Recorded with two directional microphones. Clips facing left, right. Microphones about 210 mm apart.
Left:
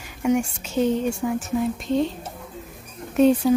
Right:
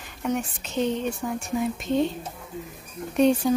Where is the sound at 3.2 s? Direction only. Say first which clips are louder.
Left 3 dB; 5° left (ahead or behind).